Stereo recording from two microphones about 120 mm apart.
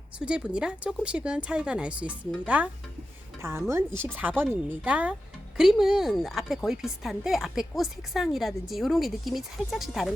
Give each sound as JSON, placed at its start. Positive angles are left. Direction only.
{"t": 0.2, "sound": "a woman's voice", "side_deg": -5}